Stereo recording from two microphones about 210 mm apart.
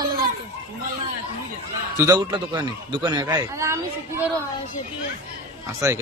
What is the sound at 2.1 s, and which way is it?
Speech, 20° right (ahead or behind).